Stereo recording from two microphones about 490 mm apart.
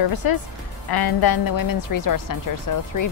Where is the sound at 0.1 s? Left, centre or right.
Left.